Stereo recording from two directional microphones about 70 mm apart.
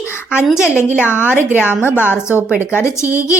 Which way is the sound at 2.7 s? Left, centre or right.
Left.